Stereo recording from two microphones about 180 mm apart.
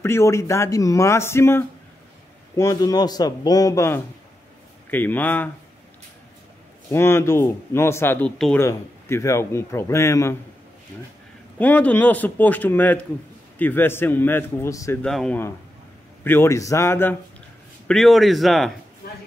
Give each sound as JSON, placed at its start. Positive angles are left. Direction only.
{"t": 0.0, "sound": "a man's voice", "side_deg": 15}
{"t": 6.9, "sound": "speech", "side_deg": 15}
{"t": 8.6, "sound": "speech", "side_deg": 15}
{"t": 11.5, "sound": "speech", "side_deg": 10}
{"t": 15.0, "sound": "speech", "side_deg": 5}
{"t": 17.8, "sound": "speech", "side_deg": 0}